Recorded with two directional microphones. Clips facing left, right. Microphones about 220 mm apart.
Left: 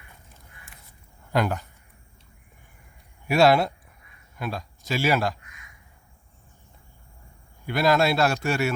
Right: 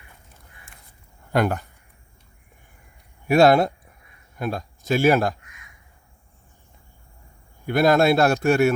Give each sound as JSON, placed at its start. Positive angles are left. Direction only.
{"t": 1.3, "sound": "a man's voice", "side_deg": -55}
{"t": 3.2, "sound": "a man's voice", "side_deg": -50}
{"t": 7.7, "sound": "a man's voice", "side_deg": -50}